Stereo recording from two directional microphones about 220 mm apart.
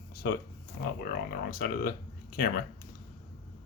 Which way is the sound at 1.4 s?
40° left (ahead or behind).